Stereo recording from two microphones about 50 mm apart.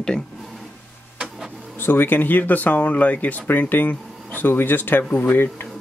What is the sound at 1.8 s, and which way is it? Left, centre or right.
Speech, left.